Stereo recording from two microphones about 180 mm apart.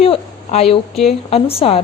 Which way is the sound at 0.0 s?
35° left (ahead or behind).